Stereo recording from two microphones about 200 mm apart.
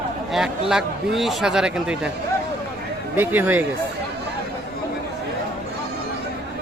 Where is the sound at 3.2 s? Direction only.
10° right (ahead or behind).